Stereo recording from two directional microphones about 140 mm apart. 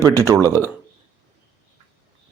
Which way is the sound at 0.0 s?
20° right (ahead or behind).